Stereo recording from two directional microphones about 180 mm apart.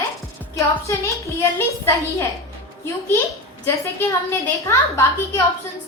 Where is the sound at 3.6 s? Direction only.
15° left (ahead or behind).